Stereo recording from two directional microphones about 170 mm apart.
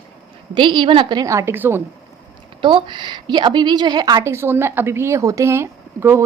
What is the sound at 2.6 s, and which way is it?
A woman's voice, 30° right (ahead or behind).